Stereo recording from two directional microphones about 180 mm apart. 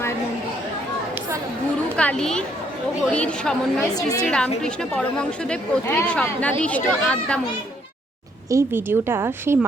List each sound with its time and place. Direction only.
2.0 s a woman's voice: 5° left (ahead or behind)
8.4 s a woman's voice: 15° right (ahead or behind)